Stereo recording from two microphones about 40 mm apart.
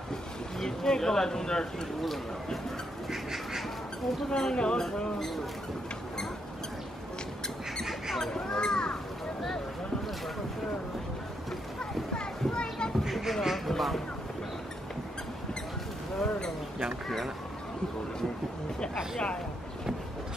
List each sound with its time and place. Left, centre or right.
0.1 s speech: centre
2.0 s speech: centre
3.1 s duck: centre
4.4 s speech: left
8.2 s speech: centre
11.8 s children playing: left
13.0 s a sound: centre
13.7 s speech: centre
16.2 s a sound: centre